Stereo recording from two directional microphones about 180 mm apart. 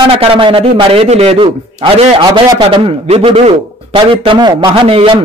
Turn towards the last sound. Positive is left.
turn(degrees=-30)  # may be behind; listen again after turning